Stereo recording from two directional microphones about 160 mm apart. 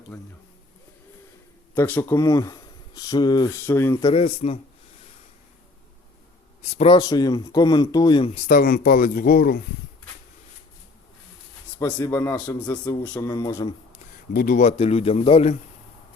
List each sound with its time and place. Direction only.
1.7 s speech: 15° left (ahead or behind)
4.0 s speech: 35° left (ahead or behind)
6.6 s a man's voice: 40° left (ahead or behind)
6.9 s speech: 25° left (ahead or behind)
8.4 s speech: 60° left (ahead or behind)
11.8 s a man's voice: 15° left (ahead or behind)
14.3 s speech: 60° left (ahead or behind); by 15.5 s 40° left (ahead or behind)